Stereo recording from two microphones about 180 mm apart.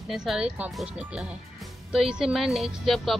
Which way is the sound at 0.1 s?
Centre (ahead or behind).